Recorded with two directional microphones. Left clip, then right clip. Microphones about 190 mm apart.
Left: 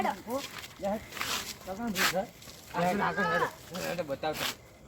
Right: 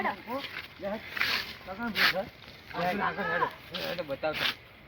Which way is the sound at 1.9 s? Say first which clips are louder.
Right 3 dB; centre (ahead or behind).